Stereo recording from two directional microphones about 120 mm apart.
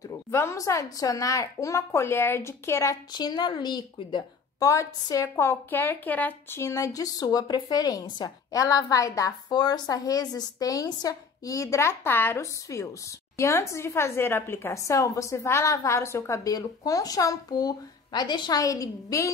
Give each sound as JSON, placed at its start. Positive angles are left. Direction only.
{"t": 0.3, "sound": "a woman's voice", "side_deg": 25}
{"t": 3.1, "sound": "a woman's voice", "side_deg": 35}